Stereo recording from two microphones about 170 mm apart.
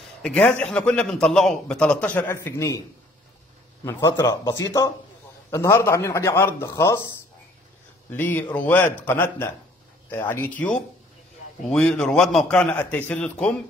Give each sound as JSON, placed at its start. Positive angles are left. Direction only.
{"t": 0.2, "sound": "a man's voice", "side_deg": 5}
{"t": 3.8, "sound": "a man's voice", "side_deg": 15}
{"t": 8.1, "sound": "a man's voice", "side_deg": 10}